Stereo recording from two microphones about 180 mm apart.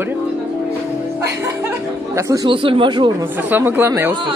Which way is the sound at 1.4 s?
15° right (ahead or behind).